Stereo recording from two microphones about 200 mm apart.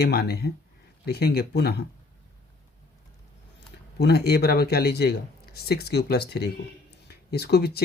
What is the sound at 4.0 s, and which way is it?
Speech, 55° left (ahead or behind).